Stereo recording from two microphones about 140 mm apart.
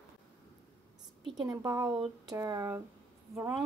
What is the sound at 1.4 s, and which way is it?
Speech, 25° right (ahead or behind).